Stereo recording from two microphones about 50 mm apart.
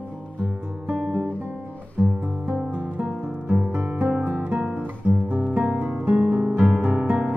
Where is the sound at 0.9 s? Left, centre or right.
Right.